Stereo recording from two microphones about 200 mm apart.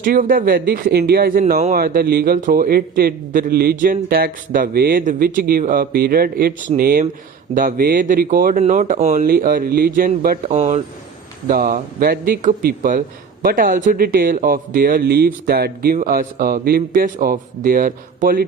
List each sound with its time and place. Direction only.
0.0 s a man's voice: 45° right (ahead or behind)
9.2 s a man's voice: 45° right (ahead or behind)
11.4 s a man's voice: 45° right (ahead or behind)